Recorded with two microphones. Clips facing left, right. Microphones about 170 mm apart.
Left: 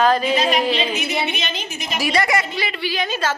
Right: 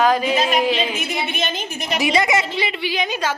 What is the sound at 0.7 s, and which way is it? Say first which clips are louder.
A woman's voice: left 1 dB; 50° right (ahead or behind).